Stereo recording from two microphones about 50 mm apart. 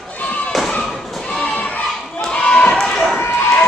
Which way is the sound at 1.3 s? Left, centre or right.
Left.